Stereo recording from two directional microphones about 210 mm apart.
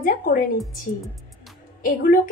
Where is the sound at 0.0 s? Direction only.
45° left (ahead or behind).